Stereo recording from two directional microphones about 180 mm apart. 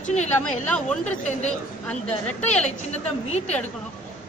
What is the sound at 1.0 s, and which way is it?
Speech, 40° left (ahead or behind).